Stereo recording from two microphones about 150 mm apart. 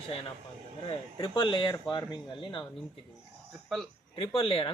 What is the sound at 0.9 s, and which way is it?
Speech, 30° left (ahead or behind).